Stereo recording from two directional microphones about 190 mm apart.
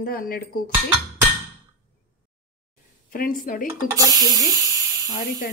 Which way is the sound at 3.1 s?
45° left (ahead or behind).